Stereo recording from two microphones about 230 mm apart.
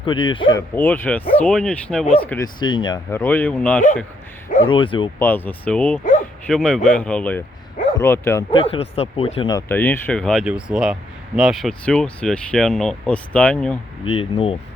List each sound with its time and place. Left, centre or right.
0.0 s speech: left
0.5 s speech: centre
2.6 s speech: centre
4.6 s speech: left
5.2 s speech: centre
8.4 s speech: left; by 13.7 s centre
14.0 s speech: left